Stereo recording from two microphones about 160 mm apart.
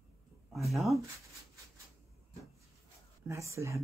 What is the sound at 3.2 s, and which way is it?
Speech, 20° right (ahead or behind).